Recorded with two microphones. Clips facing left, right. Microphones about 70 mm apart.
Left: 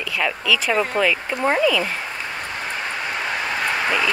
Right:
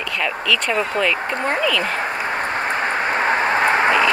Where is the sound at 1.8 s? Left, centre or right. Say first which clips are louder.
Right 5 dB; right.